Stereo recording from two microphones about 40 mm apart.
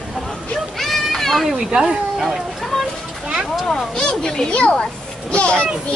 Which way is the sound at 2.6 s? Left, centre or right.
Centre.